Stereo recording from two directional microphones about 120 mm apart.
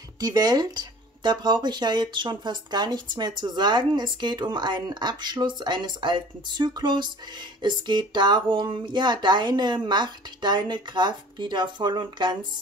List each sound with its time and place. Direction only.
0.2 s speech: 35° right (ahead or behind)